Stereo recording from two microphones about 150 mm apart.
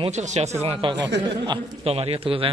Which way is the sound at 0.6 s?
30° right (ahead or behind).